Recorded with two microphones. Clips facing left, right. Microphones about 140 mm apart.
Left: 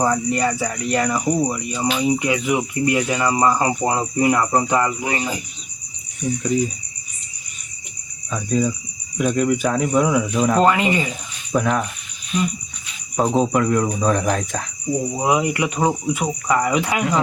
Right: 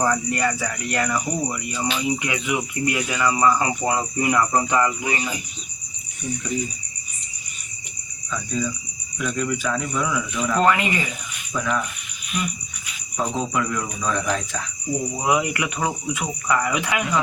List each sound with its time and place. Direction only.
0.0 s speech: 20° left (ahead or behind)
8.3 s speech: 45° left (ahead or behind)
10.7 s speech: 25° left (ahead or behind)
11.5 s speech: 50° left (ahead or behind)
12.3 s speech: 30° left (ahead or behind)
13.1 s speech: 40° left (ahead or behind)
15.1 s speech: 25° left (ahead or behind)